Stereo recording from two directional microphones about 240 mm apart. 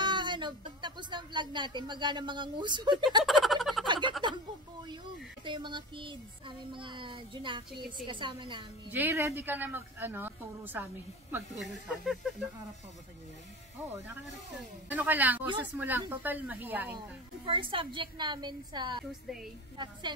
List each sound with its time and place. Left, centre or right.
0.0 s music: centre
3.3 s a sound: centre
3.8 s a sound: centre
5.4 s child singing: centre
8.9 s speech: centre
14.9 s speech: centre
17.5 s child singing: right